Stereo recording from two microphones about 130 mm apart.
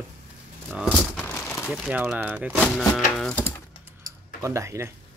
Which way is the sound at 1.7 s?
Centre (ahead or behind).